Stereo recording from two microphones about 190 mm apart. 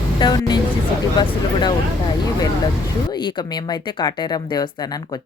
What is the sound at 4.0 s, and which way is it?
Speech, 20° left (ahead or behind).